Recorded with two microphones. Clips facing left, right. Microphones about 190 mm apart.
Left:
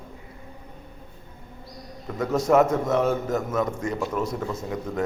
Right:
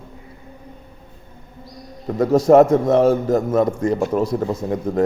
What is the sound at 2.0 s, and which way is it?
A man's voice, 35° right (ahead or behind).